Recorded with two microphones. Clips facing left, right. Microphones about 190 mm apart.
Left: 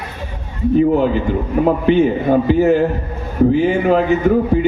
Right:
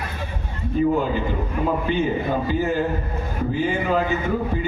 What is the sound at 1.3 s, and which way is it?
A man's voice, 70° left (ahead or behind).